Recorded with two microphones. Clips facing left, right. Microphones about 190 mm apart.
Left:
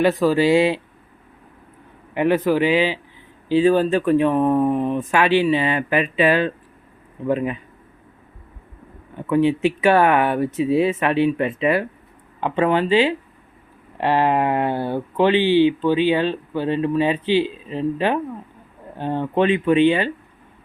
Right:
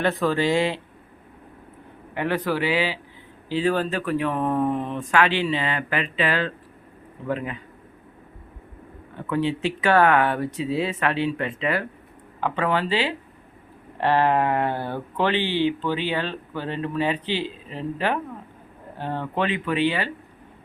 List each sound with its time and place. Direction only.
0.2 s speech: 10° left (ahead or behind)
2.1 s speech: 15° left (ahead or behind)
9.3 s speech: 15° left (ahead or behind)